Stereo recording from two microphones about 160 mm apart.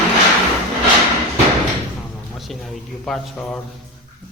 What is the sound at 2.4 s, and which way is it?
A man's voice, centre (ahead or behind).